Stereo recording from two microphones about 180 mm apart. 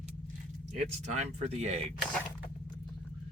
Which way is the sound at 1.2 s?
40° right (ahead or behind).